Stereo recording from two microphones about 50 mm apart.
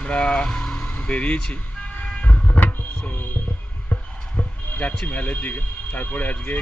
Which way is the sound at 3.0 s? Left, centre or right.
Left.